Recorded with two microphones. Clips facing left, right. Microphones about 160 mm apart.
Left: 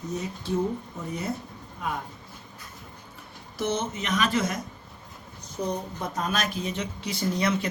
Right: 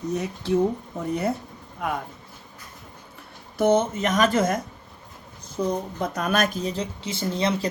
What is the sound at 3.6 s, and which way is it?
Speech, 50° right (ahead or behind).